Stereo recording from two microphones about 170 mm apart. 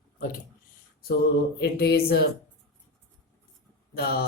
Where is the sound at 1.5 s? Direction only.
70° left (ahead or behind).